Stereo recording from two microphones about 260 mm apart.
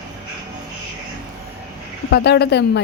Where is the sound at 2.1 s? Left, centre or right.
Left.